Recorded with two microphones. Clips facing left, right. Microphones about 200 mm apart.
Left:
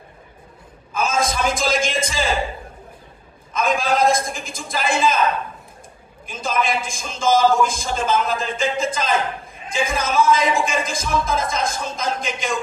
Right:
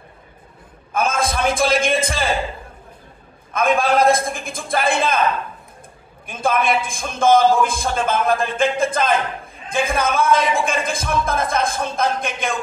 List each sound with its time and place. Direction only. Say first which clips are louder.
0.9 s a man's voice: right 1 dB; 55° right (ahead or behind)
3.5 s a man's voice: right 3 dB; 55° right (ahead or behind)
6.2 s a man's voice: right 4 dB; 55° right (ahead or behind)